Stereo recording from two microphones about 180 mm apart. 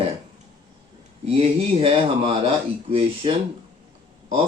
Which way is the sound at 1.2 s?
35° right (ahead or behind).